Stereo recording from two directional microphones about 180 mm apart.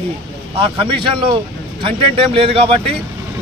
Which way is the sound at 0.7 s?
25° right (ahead or behind).